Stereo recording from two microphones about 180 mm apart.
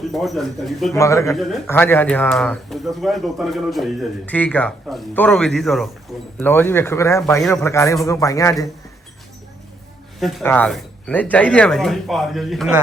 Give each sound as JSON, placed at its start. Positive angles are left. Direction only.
{"t": 0.1, "sound": "speech", "side_deg": 0}
{"t": 0.9, "sound": "a man's voice", "side_deg": 15}
{"t": 6.4, "sound": "a man's voice", "side_deg": 10}
{"t": 10.2, "sound": "speech", "side_deg": 0}